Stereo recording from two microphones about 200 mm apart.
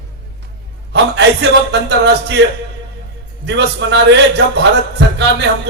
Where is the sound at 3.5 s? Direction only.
60° right (ahead or behind).